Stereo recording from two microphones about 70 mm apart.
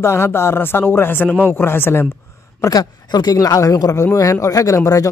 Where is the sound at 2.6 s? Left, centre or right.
Left.